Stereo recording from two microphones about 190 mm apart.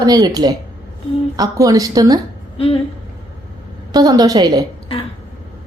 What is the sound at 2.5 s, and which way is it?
Speech, 30° left (ahead or behind).